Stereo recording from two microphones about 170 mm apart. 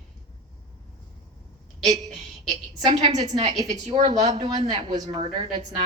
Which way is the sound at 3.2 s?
40° right (ahead or behind).